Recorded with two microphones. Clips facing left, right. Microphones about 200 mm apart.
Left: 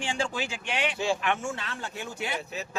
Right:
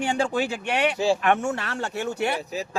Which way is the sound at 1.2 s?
60° right (ahead or behind).